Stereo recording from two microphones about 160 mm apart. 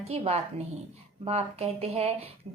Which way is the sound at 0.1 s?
40° right (ahead or behind).